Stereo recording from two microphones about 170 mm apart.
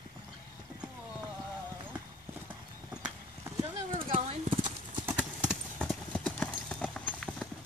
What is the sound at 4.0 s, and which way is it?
Clip-clop, 35° right (ahead or behind).